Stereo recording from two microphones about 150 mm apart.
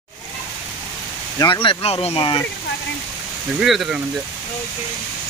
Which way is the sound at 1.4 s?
30° left (ahead or behind).